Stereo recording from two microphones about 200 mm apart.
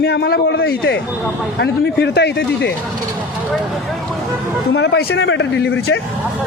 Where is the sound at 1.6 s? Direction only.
55° left (ahead or behind).